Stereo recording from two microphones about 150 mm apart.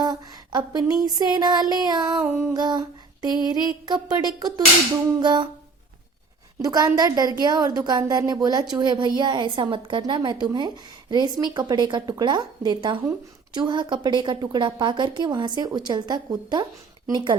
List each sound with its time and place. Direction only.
0.0 s a woman's voice: 25° right (ahead or behind)
2.2 s humming: 15° right (ahead or behind)
3.4 s a woman's voice: 25° right (ahead or behind)
6.6 s a woman's voice: 25° right (ahead or behind)